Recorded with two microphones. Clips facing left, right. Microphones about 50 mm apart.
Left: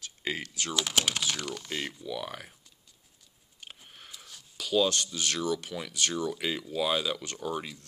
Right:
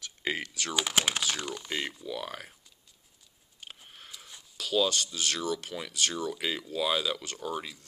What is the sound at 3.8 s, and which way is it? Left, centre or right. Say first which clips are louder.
Sniff: even; centre.